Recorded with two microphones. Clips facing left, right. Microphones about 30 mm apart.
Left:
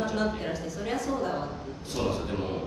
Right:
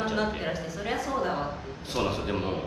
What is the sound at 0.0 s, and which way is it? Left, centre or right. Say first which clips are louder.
A man's voice: right 1 dB; right.